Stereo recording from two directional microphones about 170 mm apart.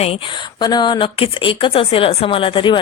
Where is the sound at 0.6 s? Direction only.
25° left (ahead or behind).